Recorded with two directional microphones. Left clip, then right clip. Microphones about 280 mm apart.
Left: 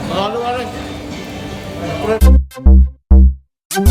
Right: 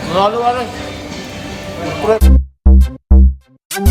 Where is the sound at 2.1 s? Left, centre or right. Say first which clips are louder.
Right 4 dB; centre.